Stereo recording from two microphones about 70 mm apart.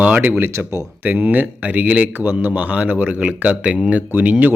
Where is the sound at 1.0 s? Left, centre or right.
Right.